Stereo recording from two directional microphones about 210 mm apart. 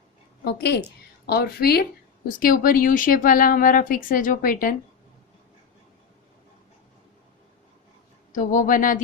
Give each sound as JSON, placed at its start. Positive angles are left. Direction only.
{"t": 0.4, "sound": "a woman's voice", "side_deg": 50}
{"t": 8.3, "sound": "speech", "side_deg": 40}